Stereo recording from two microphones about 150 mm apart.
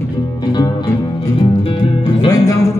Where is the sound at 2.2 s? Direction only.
25° left (ahead or behind).